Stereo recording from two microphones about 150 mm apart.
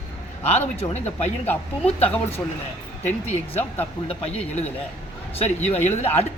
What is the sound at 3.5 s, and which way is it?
Speech, 10° left (ahead or behind).